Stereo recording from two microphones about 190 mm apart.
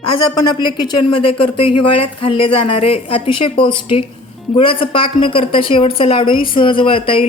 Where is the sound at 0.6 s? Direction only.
20° left (ahead or behind).